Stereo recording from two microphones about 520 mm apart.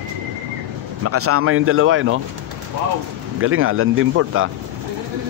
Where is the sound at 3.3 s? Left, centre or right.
Right.